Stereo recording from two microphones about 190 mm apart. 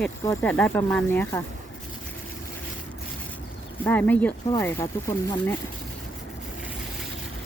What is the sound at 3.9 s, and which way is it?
Speech, 10° left (ahead or behind).